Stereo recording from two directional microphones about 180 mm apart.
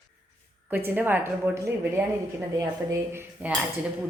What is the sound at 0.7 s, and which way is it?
A woman's voice, 10° right (ahead or behind).